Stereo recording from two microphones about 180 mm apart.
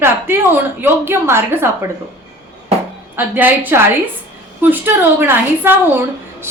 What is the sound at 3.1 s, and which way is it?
A woman's voice, 10° right (ahead or behind).